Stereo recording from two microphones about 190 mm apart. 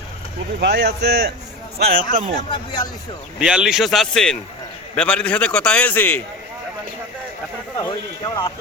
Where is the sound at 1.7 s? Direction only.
50° right (ahead or behind).